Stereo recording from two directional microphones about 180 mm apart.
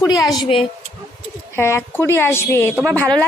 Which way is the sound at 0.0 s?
20° left (ahead or behind).